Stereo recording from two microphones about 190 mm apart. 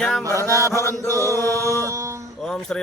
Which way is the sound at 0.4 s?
15° left (ahead or behind).